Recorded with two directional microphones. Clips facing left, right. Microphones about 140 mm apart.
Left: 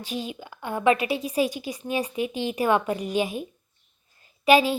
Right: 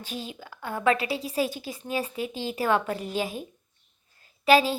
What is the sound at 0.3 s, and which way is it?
Speech, 15° left (ahead or behind).